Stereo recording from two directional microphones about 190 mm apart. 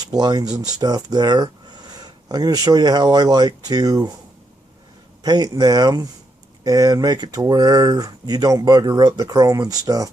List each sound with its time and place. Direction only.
0.1 s speech: 20° right (ahead or behind)
5.2 s speech: 20° right (ahead or behind)